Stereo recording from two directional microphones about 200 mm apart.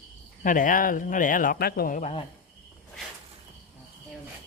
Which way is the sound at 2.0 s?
30° left (ahead or behind).